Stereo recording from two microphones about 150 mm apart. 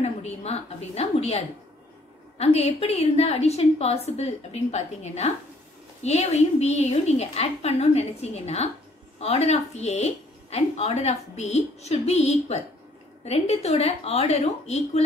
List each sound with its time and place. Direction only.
0.0 s a woman's voice: 45° left (ahead or behind)